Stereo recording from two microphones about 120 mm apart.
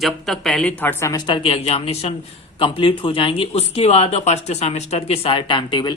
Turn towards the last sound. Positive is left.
turn(degrees=40)  # may be behind; listen again after turning